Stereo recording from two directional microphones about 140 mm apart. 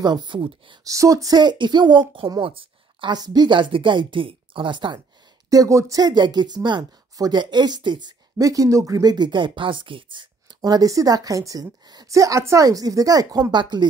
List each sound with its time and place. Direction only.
0.0 s a woman's voice: 30° right (ahead or behind)
0.8 s a woman's voice: 25° right (ahead or behind)
5.5 s speech: 25° right (ahead or behind)